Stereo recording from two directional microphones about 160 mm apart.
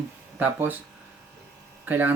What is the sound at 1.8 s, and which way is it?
Speech, 10° right (ahead or behind).